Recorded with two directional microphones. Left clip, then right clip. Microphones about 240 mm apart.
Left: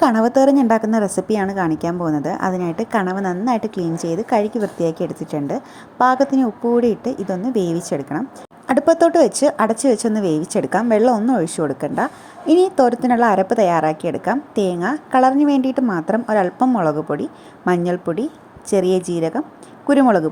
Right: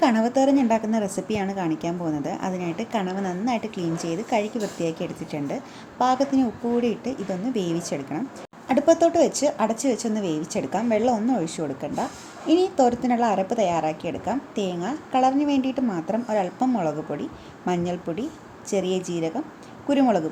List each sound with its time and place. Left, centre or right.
0.0 s a woman's voice: left